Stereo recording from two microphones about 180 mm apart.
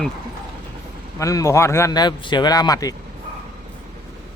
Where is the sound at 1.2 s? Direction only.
20° left (ahead or behind).